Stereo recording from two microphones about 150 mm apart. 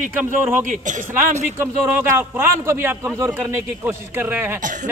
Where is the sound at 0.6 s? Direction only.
55° right (ahead or behind).